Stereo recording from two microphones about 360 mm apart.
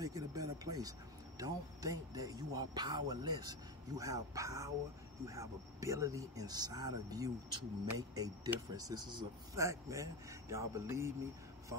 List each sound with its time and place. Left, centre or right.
0.0 s speech: centre